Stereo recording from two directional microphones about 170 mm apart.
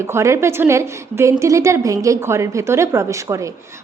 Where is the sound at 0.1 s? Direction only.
15° right (ahead or behind).